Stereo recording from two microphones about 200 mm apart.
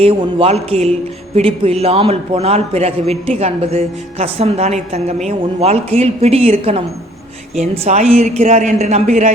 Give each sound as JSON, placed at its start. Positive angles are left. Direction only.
{"t": 0.0, "sound": "a man's voice", "side_deg": -30}